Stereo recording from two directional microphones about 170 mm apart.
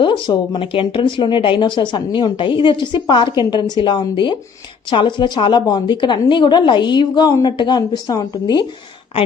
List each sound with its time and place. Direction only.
0.0 s speech: 25° left (ahead or behind)